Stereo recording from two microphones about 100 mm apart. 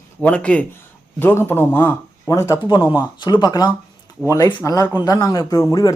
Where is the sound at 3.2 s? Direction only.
45° left (ahead or behind).